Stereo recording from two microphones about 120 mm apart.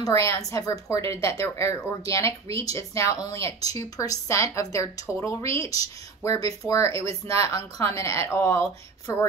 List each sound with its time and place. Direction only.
0.0 s speech: 25° left (ahead or behind)